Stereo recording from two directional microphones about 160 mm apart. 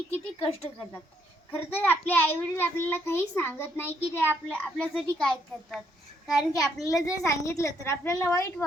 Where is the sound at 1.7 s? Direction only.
10° left (ahead or behind).